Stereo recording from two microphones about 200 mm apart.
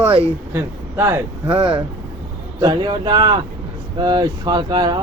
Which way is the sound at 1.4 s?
25° right (ahead or behind).